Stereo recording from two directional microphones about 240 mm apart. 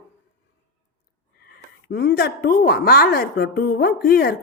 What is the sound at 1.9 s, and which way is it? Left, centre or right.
A woman's voice, left.